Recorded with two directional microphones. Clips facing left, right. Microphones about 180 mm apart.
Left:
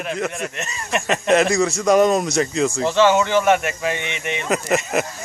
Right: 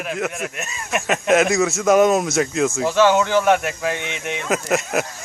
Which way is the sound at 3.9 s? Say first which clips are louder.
Left 1 dB; 65° left (ahead or behind).